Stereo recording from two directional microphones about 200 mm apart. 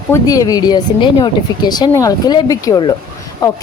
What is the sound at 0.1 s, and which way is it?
A woman's voice, 15° left (ahead or behind).